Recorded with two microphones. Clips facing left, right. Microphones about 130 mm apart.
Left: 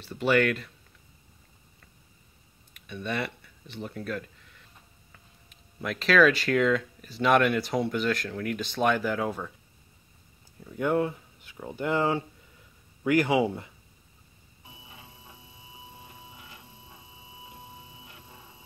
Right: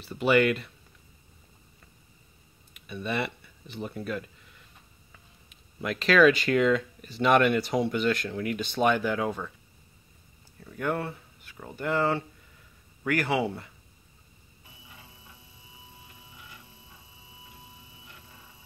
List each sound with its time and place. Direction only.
0.0 s speech: centre (ahead or behind)
2.9 s speech: 5° right (ahead or behind)
5.8 s speech: centre (ahead or behind)
10.6 s speech: 15° left (ahead or behind)
14.9 s a sound: 25° left (ahead or behind)